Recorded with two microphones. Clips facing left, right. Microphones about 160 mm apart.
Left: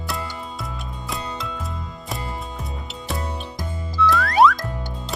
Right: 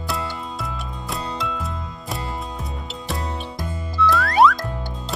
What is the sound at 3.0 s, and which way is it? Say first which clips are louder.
Music: right 1 dB; centre (ahead or behind).